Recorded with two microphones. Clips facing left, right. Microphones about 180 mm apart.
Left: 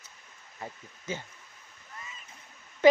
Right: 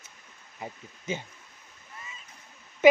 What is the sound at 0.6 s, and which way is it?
Speech, 20° right (ahead or behind).